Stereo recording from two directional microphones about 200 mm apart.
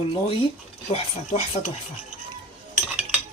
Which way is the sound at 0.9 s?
35° left (ahead or behind).